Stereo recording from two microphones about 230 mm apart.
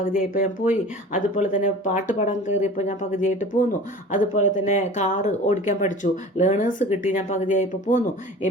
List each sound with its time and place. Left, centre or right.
0.3 s speech: left